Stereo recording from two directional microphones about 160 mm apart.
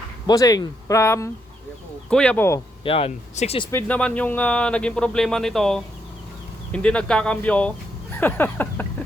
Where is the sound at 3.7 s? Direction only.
10° left (ahead or behind).